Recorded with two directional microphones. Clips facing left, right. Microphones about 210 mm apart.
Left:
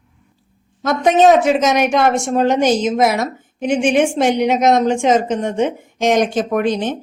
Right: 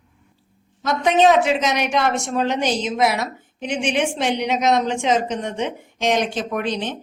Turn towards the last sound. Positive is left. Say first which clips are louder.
# left 7 dB
turn(degrees=50)  # may be behind; listen again after turning